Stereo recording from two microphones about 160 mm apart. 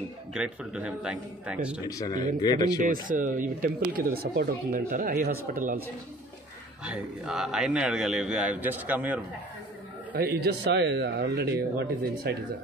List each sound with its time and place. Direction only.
0.3 s speech: 5° right (ahead or behind)
1.9 s speech: 25° left (ahead or behind)
2.8 s speech: 55° right (ahead or behind)
6.8 s a man's voice: 5° right (ahead or behind)
10.1 s speech: 75° right (ahead or behind)